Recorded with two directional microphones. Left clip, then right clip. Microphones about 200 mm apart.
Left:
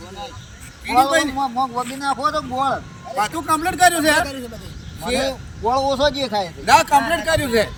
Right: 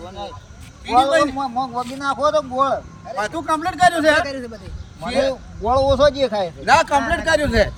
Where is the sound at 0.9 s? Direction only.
35° right (ahead or behind).